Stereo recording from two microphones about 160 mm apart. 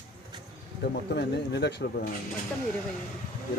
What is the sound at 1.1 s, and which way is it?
Speech, 90° left.